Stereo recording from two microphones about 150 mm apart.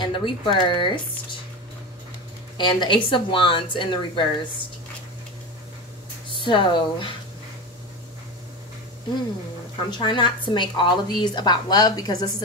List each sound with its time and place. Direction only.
0.0 s a woman's voice: 30° left (ahead or behind)
2.5 s a woman's voice: 30° left (ahead or behind)
6.4 s a woman's voice: 30° left (ahead or behind)
9.8 s a woman's voice: 30° left (ahead or behind)